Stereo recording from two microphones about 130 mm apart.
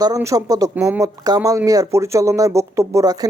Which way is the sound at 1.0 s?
30° right (ahead or behind).